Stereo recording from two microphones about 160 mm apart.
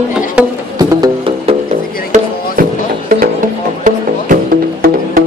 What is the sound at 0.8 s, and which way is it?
Music, 25° right (ahead or behind).